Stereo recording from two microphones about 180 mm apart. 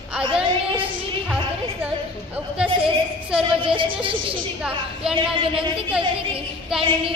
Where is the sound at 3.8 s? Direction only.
30° right (ahead or behind).